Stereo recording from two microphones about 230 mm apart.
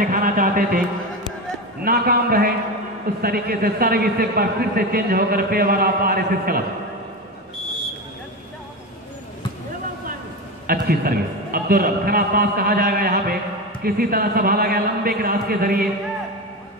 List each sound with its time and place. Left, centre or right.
0.0 s music: right
1.8 s a man's voice: right
10.7 s a man's voice: right